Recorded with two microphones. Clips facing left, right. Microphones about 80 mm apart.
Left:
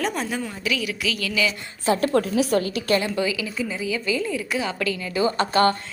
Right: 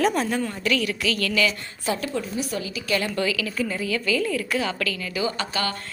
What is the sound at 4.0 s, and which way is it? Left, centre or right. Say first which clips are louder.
A woman's voice: right 1 dB; centre.